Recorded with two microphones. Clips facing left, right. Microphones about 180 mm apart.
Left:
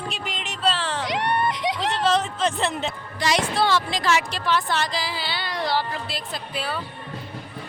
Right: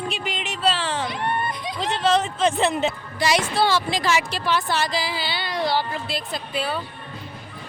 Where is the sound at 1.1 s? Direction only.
85° left.